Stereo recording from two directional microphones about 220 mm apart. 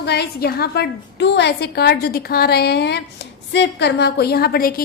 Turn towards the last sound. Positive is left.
turn(degrees=40)  # may be behind; listen again after turning